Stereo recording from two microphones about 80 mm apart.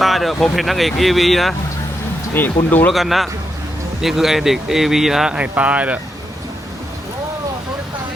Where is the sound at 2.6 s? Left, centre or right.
Left.